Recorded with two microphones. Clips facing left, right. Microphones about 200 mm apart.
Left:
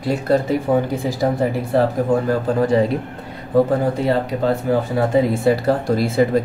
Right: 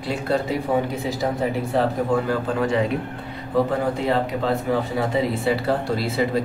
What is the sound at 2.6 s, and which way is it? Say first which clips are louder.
Speech: left 6 dB; 35° left (ahead or behind).